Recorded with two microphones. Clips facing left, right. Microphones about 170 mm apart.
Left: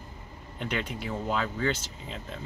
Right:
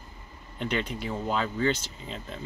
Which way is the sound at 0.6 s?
5° left (ahead or behind).